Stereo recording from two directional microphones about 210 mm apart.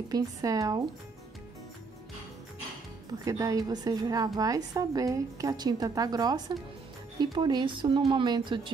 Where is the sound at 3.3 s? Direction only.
15° right (ahead or behind).